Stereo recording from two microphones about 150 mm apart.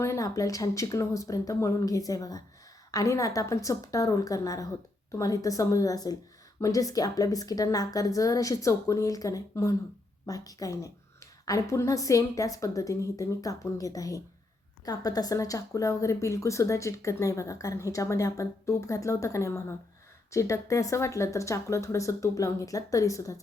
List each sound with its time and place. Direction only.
0.0 s speech: 20° left (ahead or behind)